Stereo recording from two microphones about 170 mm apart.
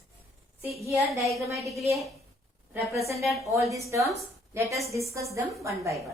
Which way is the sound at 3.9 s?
15° right (ahead or behind).